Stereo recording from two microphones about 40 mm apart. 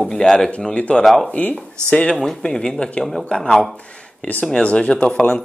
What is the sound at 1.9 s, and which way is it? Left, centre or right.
Speech, left.